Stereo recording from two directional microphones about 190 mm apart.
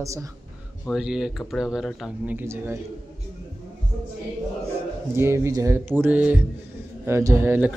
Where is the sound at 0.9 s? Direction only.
5° right (ahead or behind).